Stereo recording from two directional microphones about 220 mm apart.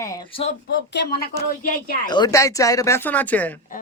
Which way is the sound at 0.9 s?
50° left (ahead or behind).